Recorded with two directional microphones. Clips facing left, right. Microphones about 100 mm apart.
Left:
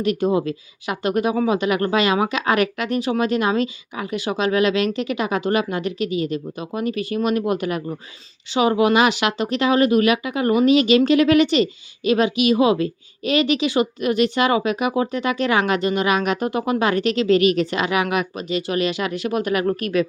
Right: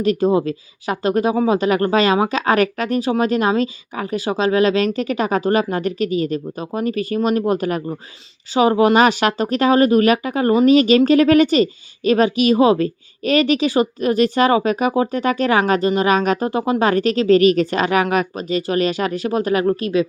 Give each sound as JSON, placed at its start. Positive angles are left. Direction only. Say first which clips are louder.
{"t": 0.0, "sound": "a woman's voice", "louder": "right 3 dB", "side_deg": -35}